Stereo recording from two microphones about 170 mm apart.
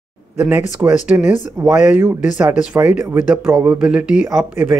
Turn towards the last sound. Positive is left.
turn(degrees=-5)  # may be behind; listen again after turning